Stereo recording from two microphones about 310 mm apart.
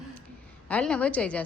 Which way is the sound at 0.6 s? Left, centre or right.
Centre.